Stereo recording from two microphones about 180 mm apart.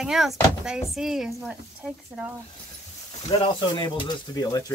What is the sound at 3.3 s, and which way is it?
Speech, 25° left (ahead or behind).